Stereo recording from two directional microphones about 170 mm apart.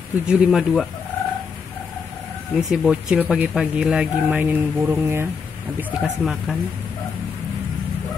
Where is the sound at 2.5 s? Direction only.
5° right (ahead or behind).